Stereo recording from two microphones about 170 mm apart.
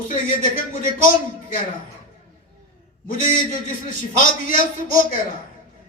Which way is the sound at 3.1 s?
50° left (ahead or behind).